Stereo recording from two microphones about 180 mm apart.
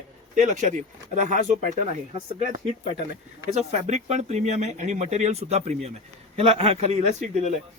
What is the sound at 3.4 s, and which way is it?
Speech, 40° right (ahead or behind).